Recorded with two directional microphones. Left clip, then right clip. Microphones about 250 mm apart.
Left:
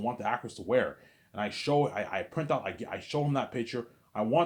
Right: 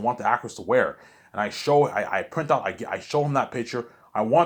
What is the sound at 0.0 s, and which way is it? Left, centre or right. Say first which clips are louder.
Speech: right 9 dB; centre.